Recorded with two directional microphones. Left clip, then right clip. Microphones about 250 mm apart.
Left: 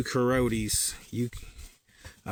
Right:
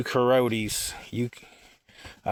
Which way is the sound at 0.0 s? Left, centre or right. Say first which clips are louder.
Right 5 dB; centre.